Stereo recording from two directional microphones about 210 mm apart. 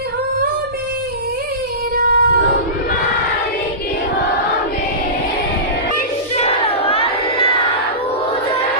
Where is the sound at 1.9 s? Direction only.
45° right (ahead or behind).